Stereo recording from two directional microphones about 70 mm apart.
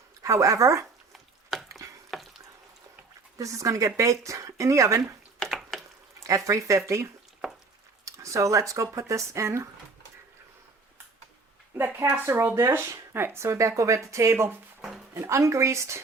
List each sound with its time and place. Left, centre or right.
0.2 s speech: right
1.1 s chopping: centre
2.0 s frying: centre
3.3 s speech: right
5.5 s a sound: centre
6.1 s speech: right
11.9 s speech: right
12.2 s speech: right
14.8 s music: centre
15.1 s speech: right